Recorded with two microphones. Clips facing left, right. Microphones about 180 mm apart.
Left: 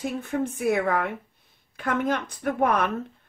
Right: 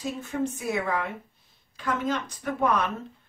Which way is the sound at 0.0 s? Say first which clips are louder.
Left 2 dB; 55° left (ahead or behind).